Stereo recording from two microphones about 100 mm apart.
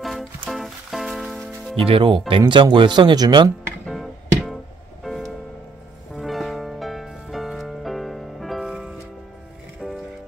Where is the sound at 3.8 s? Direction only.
Centre (ahead or behind).